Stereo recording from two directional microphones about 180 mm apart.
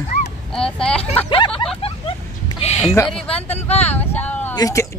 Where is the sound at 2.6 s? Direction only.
35° left (ahead or behind).